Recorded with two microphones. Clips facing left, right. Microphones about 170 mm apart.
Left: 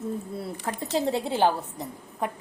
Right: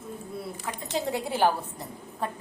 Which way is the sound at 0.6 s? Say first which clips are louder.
Left 5 dB; 25° left (ahead or behind).